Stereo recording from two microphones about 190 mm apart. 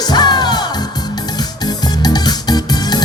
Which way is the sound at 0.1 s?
20° left (ahead or behind).